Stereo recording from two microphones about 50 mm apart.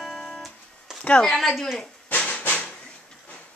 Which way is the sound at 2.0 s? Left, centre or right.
Left.